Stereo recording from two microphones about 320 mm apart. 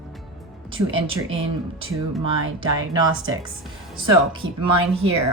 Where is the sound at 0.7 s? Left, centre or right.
Right.